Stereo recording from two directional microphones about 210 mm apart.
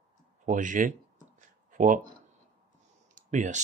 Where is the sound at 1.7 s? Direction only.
40° right (ahead or behind).